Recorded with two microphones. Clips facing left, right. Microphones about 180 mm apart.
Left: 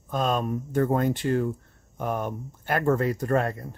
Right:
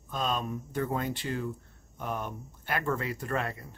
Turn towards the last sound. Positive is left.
turn(degrees=45)  # may be behind; listen again after turning